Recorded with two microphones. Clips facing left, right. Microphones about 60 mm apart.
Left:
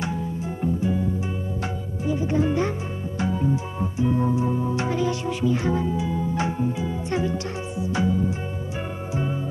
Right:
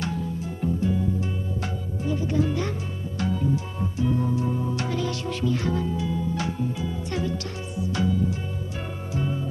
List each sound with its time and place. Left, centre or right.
0.0 s music: centre
2.0 s music: left
3.2 s organ: left
9.1 s music: left